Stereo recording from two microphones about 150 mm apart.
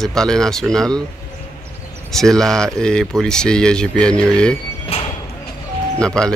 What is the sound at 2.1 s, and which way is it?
Speech, 5° left (ahead or behind).